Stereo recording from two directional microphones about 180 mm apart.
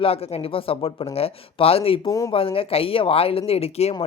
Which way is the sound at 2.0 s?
20° left (ahead or behind).